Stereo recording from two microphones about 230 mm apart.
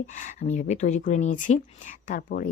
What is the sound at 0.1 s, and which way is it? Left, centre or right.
Speech, left.